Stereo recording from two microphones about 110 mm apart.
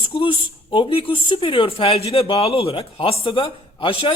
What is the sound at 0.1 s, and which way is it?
Speech, 50° left (ahead or behind).